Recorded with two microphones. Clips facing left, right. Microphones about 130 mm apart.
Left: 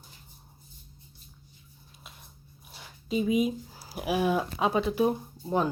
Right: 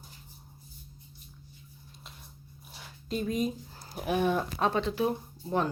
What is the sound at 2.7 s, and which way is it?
Speech, 5° left (ahead or behind).